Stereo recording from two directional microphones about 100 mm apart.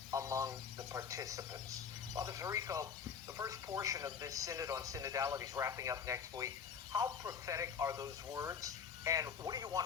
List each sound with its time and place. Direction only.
0.1 s a man's voice: 30° right (ahead or behind)